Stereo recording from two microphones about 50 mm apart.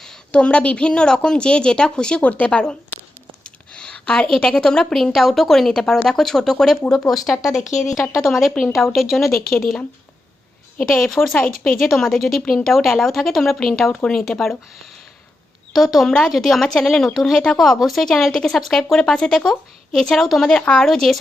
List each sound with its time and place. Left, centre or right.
0.3 s a woman's voice: left
3.4 s a sound: centre
4.4 s a woman's voice: centre
7.6 s speech: left
8.1 s a woman's voice: centre
9.3 s speech: left
11.0 s a woman's voice: centre
15.7 s a woman's voice: centre
18.9 s a woman's voice: centre
20.5 s a woman's voice: left
20.8 s a woman's voice: centre